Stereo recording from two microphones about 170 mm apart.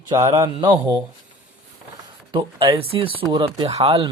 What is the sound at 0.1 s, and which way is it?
Speech, 20° right (ahead or behind).